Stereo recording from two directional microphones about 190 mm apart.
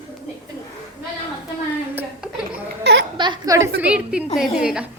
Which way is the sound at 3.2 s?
20° right (ahead or behind).